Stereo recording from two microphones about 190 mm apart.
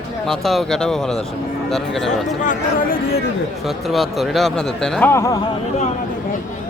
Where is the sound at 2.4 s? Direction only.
45° left (ahead or behind).